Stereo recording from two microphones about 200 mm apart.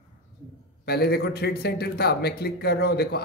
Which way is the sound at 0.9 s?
55° left (ahead or behind).